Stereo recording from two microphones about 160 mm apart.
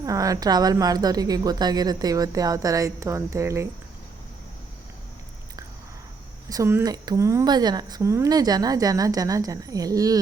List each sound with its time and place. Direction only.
0.0 s a woman's voice: 20° right (ahead or behind)
6.5 s a woman's voice: 15° right (ahead or behind)